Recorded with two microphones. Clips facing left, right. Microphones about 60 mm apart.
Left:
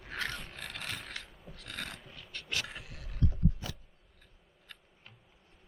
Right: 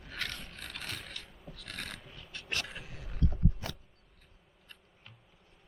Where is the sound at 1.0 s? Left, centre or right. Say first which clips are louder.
Left 2 dB; centre.